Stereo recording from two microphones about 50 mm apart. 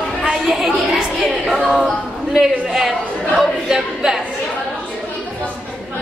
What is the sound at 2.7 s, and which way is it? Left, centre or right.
Speech, centre.